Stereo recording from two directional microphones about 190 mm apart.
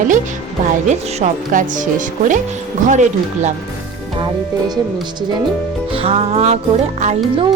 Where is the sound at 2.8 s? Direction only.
40° right (ahead or behind).